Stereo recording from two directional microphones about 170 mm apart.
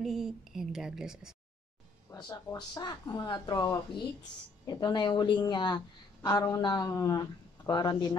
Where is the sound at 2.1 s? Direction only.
20° left (ahead or behind).